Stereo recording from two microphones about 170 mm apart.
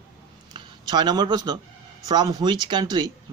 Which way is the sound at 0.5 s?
25° right (ahead or behind).